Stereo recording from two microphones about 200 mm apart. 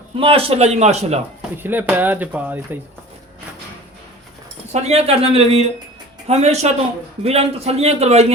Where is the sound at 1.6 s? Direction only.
10° right (ahead or behind).